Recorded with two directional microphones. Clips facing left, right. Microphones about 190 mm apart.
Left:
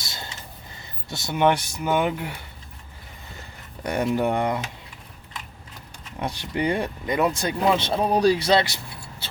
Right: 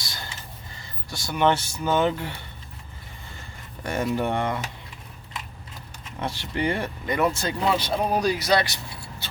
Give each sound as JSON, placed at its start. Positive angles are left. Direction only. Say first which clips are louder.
{"t": 0.0, "sound": "a sound", "louder": "left 1 dB", "side_deg": 25}
{"t": 0.8, "sound": "speech", "louder": "left 3 dB", "side_deg": 25}
{"t": 3.8, "sound": "speech", "louder": "left 2 dB", "side_deg": 20}
{"t": 6.1, "sound": "speech", "louder": "left 1 dB", "side_deg": 15}